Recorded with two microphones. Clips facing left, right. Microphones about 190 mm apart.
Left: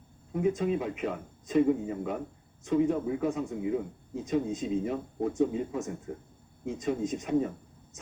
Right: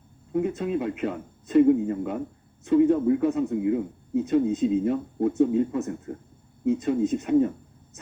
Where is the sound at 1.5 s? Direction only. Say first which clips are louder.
Right 7 dB; 5° right (ahead or behind).